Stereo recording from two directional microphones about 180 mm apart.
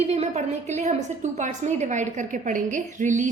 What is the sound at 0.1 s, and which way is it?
A woman's voice, 40° right (ahead or behind).